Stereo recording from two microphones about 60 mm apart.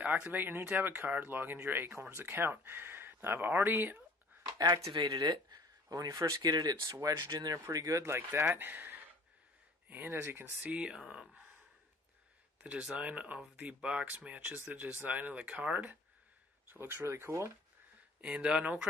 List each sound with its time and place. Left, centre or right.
0.0 s speech: right
4.6 s speech: right
7.7 s speech: right
8.0 s speech: right
10.2 s speech: right
10.6 s speech: centre
12.9 s speech: right
16.6 s speech: right
18.2 s speech: centre